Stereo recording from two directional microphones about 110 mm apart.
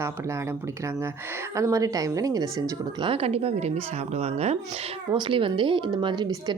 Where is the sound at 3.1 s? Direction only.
65° right (ahead or behind).